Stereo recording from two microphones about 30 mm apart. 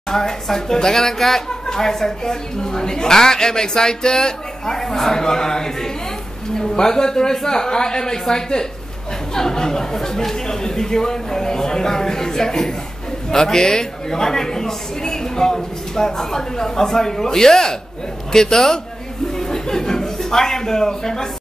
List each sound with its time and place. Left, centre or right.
0.1 s a man's voice: centre
19.3 s chuckle: centre